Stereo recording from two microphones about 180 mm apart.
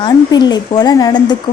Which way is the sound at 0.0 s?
25° left (ahead or behind).